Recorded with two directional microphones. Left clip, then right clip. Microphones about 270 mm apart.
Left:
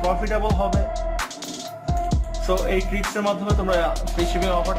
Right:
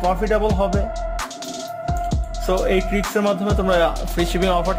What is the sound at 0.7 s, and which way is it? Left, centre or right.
Music, centre.